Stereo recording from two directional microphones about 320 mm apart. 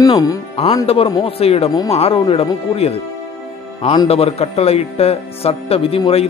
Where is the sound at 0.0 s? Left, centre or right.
Centre.